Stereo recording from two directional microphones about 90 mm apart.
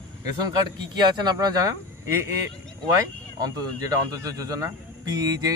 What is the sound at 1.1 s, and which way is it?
Speech, 50° right (ahead or behind).